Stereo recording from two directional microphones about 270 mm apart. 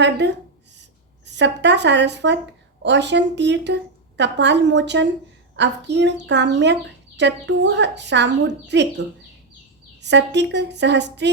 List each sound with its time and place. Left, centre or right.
0.2 s speech: right
10.0 s speech: right